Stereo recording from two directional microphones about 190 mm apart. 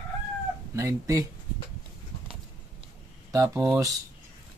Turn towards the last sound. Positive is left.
turn(degrees=-15)  # may be behind; listen again after turning